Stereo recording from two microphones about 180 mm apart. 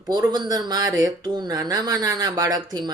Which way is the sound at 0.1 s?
20° right (ahead or behind).